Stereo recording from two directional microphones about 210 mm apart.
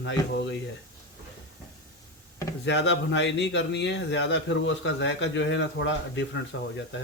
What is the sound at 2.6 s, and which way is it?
Speech, 55° left (ahead or behind).